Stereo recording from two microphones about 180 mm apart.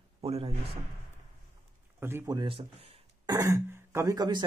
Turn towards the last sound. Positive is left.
turn(degrees=-20)  # may be behind; listen again after turning